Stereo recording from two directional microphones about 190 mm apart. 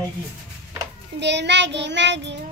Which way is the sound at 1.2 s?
65° right (ahead or behind).